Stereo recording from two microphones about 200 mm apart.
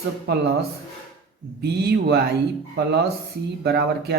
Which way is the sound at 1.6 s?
55° right (ahead or behind).